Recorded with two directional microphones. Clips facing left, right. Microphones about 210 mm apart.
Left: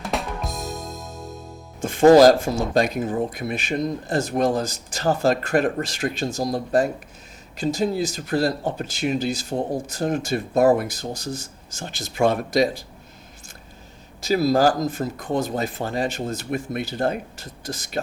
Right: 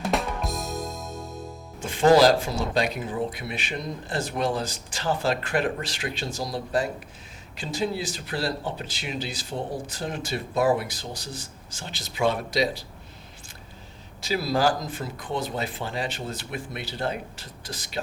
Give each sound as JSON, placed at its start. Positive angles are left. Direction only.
{"t": 0.0, "sound": "drum", "side_deg": 0}
{"t": 1.8, "sound": "speech", "side_deg": 45}
{"t": 14.2, "sound": "speech", "side_deg": 45}